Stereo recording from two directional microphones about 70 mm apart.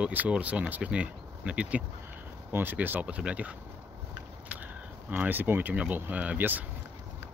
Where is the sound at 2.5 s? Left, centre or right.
Right.